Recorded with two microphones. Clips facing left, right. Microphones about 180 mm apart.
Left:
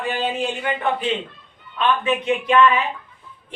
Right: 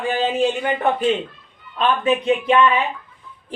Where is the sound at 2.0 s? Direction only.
30° right (ahead or behind).